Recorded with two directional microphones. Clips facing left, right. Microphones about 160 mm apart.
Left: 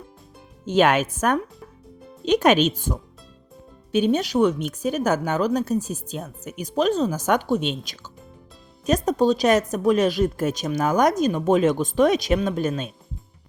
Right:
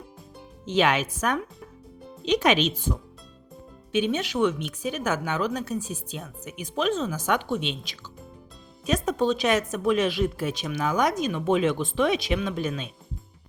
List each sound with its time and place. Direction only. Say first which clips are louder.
0.6 s a woman's voice: left 4 dB; 50° left (ahead or behind)
8.9 s a woman's voice: left 5 dB; 40° left (ahead or behind)